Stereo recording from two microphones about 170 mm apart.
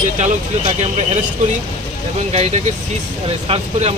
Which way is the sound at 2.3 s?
40° right (ahead or behind).